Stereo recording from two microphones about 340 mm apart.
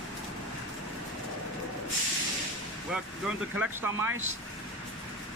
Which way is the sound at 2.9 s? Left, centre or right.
Centre.